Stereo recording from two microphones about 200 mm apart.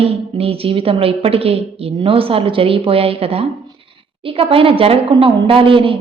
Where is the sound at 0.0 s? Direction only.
30° right (ahead or behind).